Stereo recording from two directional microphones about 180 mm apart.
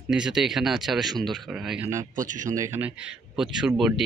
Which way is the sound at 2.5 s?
15° right (ahead or behind).